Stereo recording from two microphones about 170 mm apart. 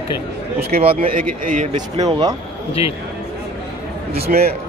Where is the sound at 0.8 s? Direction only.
35° right (ahead or behind).